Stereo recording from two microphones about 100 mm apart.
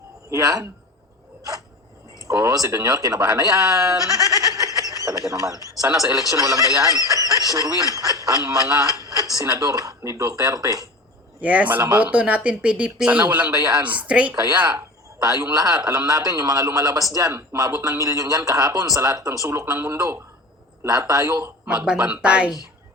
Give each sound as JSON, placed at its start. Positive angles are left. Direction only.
{"t": 0.3, "sound": "speech", "side_deg": -35}
{"t": 2.2, "sound": "speech", "side_deg": -30}
{"t": 11.3, "sound": "speech", "side_deg": -15}
{"t": 15.6, "sound": "speech", "side_deg": -35}
{"t": 21.7, "sound": "speech", "side_deg": -10}